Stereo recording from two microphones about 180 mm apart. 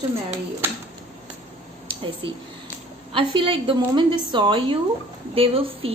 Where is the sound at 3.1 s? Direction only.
30° right (ahead or behind).